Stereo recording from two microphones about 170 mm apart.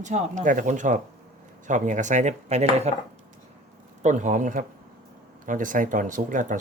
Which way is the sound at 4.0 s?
45° right (ahead or behind).